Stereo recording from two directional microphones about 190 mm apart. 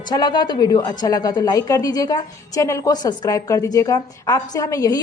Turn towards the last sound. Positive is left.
turn(degrees=20)  # may be behind; listen again after turning